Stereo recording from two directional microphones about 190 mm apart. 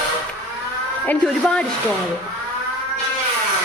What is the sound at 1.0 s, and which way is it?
Speech, 5° left (ahead or behind).